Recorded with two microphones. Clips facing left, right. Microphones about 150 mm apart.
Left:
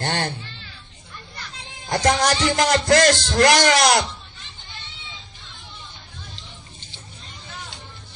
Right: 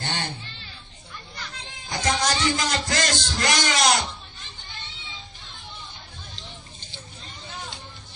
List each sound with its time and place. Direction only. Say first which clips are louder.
0.0 s a man's voice: left 6 dB; 65° left (ahead or behind)
1.9 s a man's voice: left 6 dB; 65° left (ahead or behind)